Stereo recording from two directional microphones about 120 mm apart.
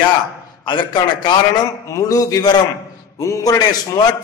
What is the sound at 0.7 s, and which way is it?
Speech, 40° left (ahead or behind).